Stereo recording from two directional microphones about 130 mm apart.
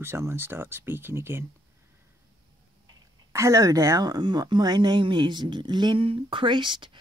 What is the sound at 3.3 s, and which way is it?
A woman's voice, 25° right (ahead or behind).